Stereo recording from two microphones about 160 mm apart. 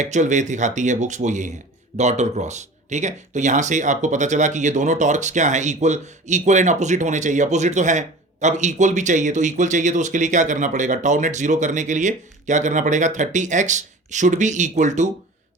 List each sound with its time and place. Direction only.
0.0 s speech: 50° right (ahead or behind)